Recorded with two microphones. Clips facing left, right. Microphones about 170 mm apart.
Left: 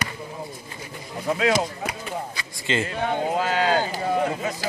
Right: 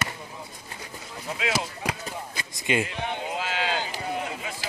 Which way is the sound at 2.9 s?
45° left (ahead or behind).